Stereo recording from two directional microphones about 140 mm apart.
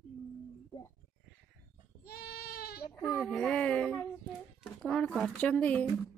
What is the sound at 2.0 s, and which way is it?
Goat, 90° left.